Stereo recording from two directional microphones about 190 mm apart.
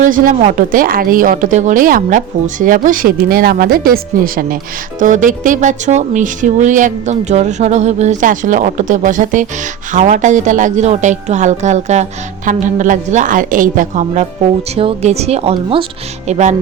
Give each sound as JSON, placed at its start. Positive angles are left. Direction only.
{"t": 0.0, "sound": "a woman's voice", "side_deg": -45}